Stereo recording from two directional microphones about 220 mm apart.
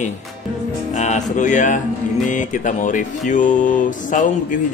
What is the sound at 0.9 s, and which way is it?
Speech, 30° left (ahead or behind).